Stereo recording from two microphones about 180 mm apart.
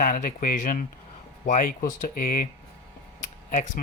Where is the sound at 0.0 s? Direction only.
45° left (ahead or behind).